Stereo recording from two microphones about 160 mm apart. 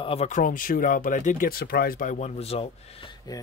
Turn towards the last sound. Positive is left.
turn(degrees=40)  # may be behind; listen again after turning